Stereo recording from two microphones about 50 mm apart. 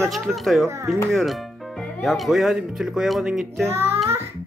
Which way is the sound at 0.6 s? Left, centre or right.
Right.